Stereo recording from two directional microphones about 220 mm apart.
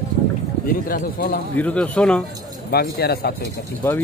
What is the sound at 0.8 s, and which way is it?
Speech, 40° left (ahead or behind).